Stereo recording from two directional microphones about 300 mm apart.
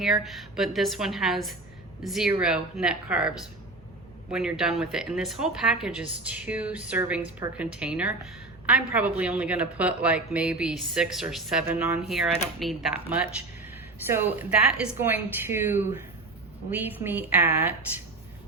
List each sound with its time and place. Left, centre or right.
0.0 s a woman's voice: centre